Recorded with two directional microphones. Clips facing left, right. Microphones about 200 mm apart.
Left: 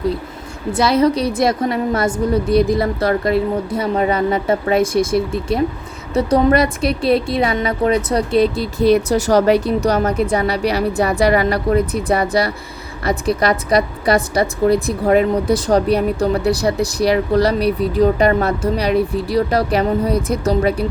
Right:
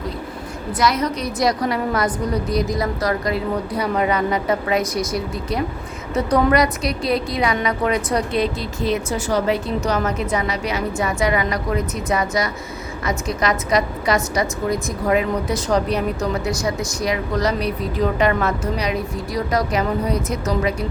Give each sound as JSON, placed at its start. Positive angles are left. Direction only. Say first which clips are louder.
{"t": 0.7, "sound": "a woman's voice", "louder": "left 6 dB", "side_deg": 30}